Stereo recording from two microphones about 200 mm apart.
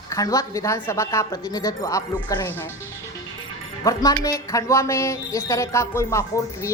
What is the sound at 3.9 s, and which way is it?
Speech, 15° left (ahead or behind).